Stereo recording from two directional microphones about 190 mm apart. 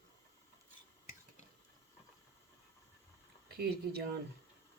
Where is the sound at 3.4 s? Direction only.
55° right (ahead or behind).